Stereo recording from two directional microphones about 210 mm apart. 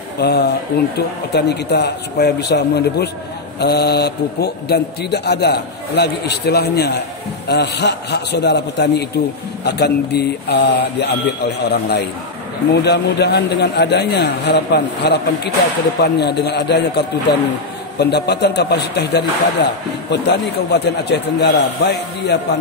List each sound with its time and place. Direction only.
0.2 s a man's voice: 50° left (ahead or behind)